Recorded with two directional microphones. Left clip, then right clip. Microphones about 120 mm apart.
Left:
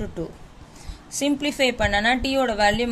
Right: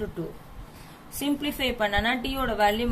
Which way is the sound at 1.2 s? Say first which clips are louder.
Left 6 dB; 60° left (ahead or behind).